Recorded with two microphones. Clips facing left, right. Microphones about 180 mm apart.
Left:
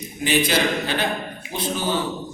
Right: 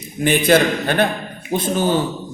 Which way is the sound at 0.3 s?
55° right (ahead or behind).